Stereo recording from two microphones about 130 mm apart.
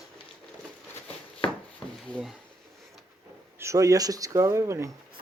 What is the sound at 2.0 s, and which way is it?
Drawer open or close, centre (ahead or behind).